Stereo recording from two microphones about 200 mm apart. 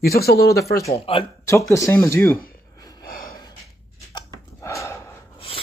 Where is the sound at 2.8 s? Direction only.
20° left (ahead or behind).